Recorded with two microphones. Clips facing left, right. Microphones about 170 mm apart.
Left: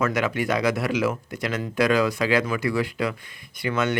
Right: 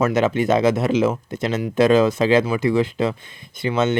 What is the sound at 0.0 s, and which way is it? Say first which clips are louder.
Speech: right 6 dB; 25° right (ahead or behind).